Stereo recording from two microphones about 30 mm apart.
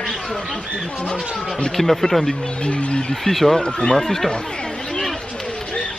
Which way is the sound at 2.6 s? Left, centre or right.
Left.